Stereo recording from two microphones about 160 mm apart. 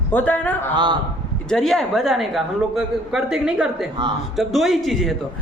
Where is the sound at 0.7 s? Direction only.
30° right (ahead or behind).